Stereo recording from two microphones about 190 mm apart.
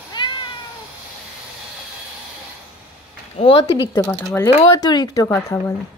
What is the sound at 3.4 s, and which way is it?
Speech, 30° left (ahead or behind).